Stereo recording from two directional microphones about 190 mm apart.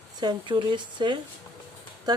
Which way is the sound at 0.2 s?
20° right (ahead or behind).